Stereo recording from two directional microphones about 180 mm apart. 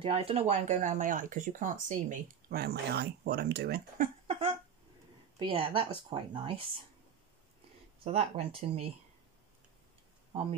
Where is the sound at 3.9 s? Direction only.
35° right (ahead or behind).